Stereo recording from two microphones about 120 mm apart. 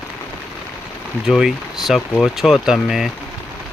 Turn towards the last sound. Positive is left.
turn(degrees=0)  # may be behind; listen again after turning